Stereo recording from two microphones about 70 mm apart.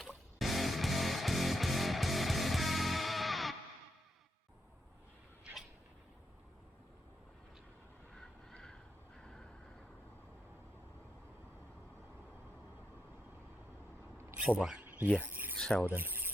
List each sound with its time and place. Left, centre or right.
0.3 s music: centre
8.1 s a sound: centre
14.3 s speech: centre
14.8 s cricket: centre
15.2 s filing: right
15.5 s pulleys: centre
15.9 s rub: right